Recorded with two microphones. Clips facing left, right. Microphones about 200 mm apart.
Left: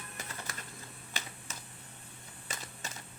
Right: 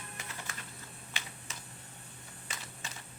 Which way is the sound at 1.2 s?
40° left (ahead or behind).